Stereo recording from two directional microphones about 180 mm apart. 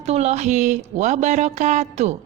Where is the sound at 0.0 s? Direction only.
35° right (ahead or behind).